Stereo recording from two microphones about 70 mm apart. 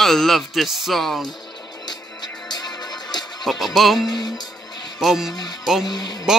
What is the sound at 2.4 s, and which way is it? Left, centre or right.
Music, left.